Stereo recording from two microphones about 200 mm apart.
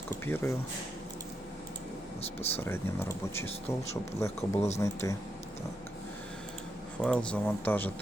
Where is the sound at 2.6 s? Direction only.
10° left (ahead or behind).